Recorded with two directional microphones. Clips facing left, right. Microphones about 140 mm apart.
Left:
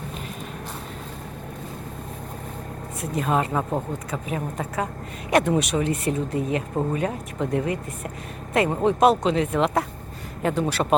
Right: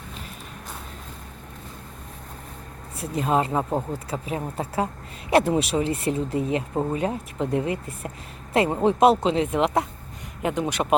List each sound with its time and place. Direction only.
3.0 s speech: 25° right (ahead or behind)